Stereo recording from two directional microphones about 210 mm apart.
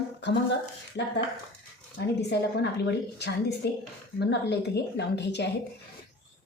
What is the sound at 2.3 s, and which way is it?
A woman's voice, 50° left (ahead or behind).